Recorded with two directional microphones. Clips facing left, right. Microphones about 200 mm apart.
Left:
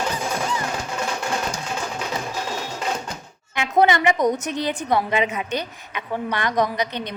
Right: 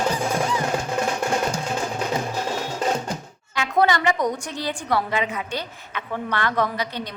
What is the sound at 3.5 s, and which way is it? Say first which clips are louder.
A woman's voice: left 2 dB; 20° left (ahead or behind).